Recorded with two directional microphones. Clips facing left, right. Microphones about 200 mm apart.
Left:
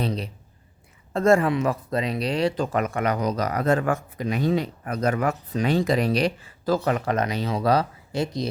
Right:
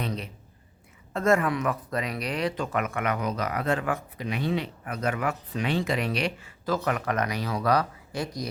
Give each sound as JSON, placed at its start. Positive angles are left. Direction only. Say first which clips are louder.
{"t": 0.0, "sound": "speech", "louder": "left 5 dB", "side_deg": 35}